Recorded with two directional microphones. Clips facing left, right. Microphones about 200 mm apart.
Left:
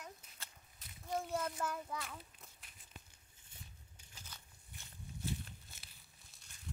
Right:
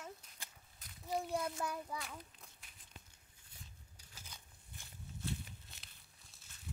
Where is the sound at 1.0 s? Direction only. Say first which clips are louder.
Right 1 dB; centre (ahead or behind).